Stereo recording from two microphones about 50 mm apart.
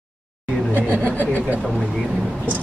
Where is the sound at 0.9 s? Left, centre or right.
Right.